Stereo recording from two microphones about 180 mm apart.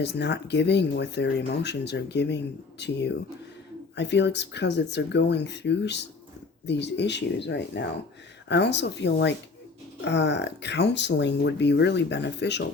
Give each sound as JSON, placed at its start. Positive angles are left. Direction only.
{"t": 0.0, "sound": "speech", "side_deg": 70}